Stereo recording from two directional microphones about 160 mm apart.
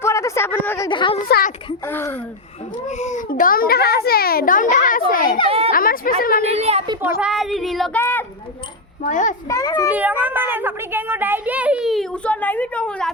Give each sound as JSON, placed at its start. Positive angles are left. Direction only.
{"t": 0.0, "sound": "a sound", "side_deg": 20}
{"t": 0.9, "sound": "a woman's voice", "side_deg": 30}
{"t": 1.3, "sound": "a child's voice", "side_deg": 65}
{"t": 1.9, "sound": "a woman's voice", "side_deg": 15}
{"t": 3.0, "sound": "a child's voice", "side_deg": 50}
{"t": 5.5, "sound": "a woman's voice", "side_deg": -35}
{"t": 5.7, "sound": "a child's voice", "side_deg": 65}
{"t": 6.4, "sound": "a woman's voice", "side_deg": -40}
{"t": 7.2, "sound": "a woman's voice", "side_deg": -5}
{"t": 7.9, "sound": "a woman's voice", "side_deg": 10}
{"t": 9.0, "sound": "a child's voice", "side_deg": 50}
{"t": 9.5, "sound": "a child's voice", "side_deg": 20}
{"t": 9.9, "sound": "a woman's voice", "side_deg": -10}